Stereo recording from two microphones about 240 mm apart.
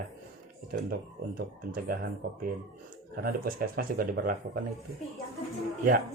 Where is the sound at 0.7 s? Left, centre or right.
Right.